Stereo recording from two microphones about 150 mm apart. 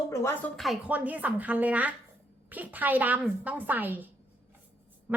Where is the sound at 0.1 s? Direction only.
15° left (ahead or behind).